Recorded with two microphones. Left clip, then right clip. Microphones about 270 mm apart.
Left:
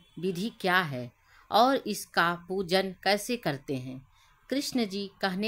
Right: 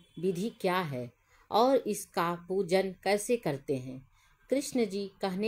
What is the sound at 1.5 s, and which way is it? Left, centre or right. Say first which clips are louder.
Speech: left 2 dB; centre.